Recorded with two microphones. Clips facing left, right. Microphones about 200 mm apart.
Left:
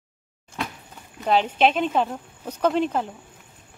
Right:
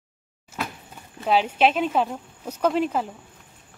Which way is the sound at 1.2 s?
5° right (ahead or behind).